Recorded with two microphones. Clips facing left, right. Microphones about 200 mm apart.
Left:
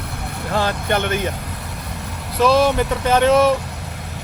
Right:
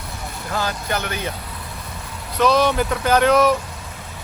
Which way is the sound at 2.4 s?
5° left (ahead or behind).